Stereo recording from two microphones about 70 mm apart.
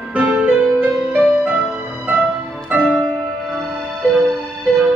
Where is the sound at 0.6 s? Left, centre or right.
Centre.